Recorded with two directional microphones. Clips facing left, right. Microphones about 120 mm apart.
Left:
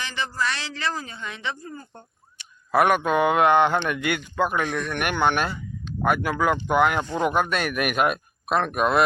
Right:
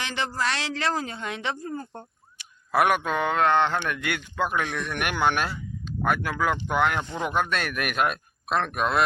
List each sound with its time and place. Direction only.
0.0 s a man's voice: 75° right (ahead or behind); by 2.0 s 55° right (ahead or behind)
2.4 s speech: centre (ahead or behind)